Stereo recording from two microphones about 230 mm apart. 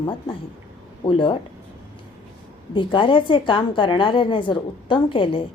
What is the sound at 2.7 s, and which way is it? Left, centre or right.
A woman's voice, left.